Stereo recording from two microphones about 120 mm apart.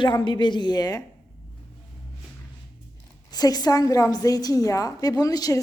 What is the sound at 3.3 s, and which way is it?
A woman's voice, 30° left (ahead or behind).